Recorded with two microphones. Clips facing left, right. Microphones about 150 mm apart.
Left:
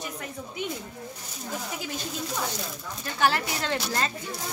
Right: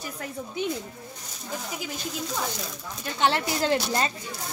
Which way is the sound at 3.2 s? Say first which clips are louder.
Right 1 dB; 25° right (ahead or behind).